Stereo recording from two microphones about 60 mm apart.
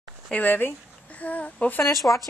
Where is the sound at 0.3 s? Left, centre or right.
Left.